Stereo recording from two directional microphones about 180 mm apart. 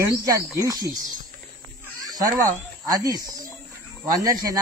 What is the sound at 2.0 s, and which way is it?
Speech, 20° right (ahead or behind).